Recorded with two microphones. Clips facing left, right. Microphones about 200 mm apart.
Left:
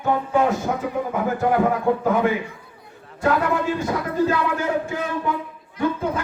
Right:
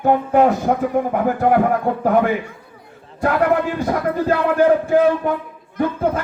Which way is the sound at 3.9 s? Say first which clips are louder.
Right 4 dB; 55° right (ahead or behind).